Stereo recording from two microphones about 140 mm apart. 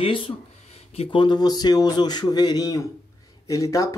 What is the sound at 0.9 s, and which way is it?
Speech, 35° left (ahead or behind).